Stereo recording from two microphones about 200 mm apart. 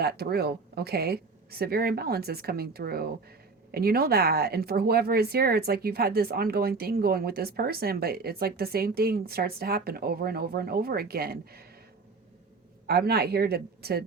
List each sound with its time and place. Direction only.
0.0 s speech: 50° right (ahead or behind)
12.9 s speech: 50° right (ahead or behind)